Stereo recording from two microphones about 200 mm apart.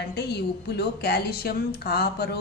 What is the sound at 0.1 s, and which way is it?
A woman's voice, 55° left (ahead or behind).